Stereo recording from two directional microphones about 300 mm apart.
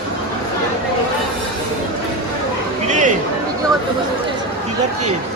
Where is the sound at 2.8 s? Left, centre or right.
Right.